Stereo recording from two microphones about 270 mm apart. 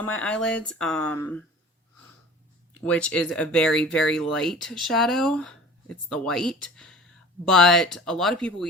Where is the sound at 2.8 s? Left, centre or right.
Centre.